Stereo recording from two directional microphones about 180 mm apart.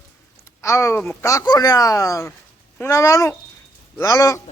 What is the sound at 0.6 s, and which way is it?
A man's voice, 15° left (ahead or behind).